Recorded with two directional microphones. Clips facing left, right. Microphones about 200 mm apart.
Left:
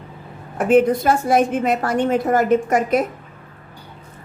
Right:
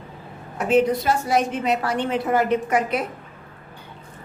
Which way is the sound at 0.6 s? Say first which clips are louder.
Left 4 dB; 50° left (ahead or behind).